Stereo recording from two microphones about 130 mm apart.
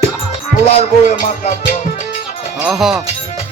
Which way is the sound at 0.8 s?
75° left (ahead or behind).